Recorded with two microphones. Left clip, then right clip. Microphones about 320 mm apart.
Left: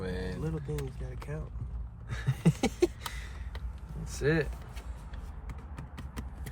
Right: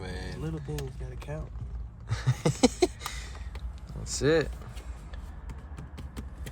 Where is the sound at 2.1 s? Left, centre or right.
Centre.